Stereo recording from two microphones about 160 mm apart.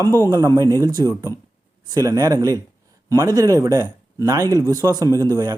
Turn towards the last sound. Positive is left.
turn(degrees=-25)  # may be behind; listen again after turning